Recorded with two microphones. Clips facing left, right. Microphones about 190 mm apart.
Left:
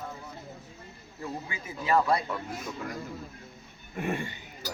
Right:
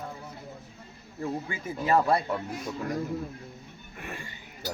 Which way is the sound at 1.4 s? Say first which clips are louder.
Even; 50° right (ahead or behind).